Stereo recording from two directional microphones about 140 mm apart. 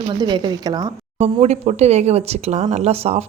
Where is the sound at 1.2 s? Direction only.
50° right (ahead or behind).